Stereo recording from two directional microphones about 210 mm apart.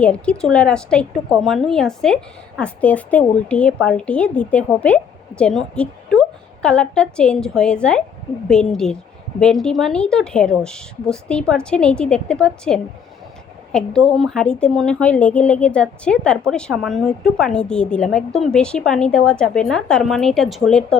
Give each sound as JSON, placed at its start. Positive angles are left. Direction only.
{"t": 0.0, "sound": "a woman's voice", "side_deg": 5}